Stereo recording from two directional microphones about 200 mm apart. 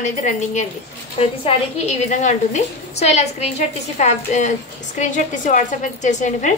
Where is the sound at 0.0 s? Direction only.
35° left (ahead or behind).